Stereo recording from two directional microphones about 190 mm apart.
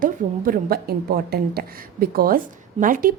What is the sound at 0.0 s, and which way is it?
A woman's voice, 45° right (ahead or behind).